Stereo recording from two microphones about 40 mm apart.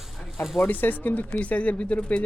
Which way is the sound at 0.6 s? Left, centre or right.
Left.